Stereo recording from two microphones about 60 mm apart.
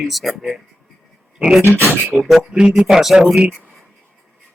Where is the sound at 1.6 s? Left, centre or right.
Right.